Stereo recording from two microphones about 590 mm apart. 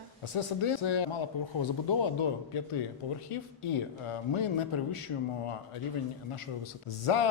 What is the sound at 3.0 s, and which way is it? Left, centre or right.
Speech, left.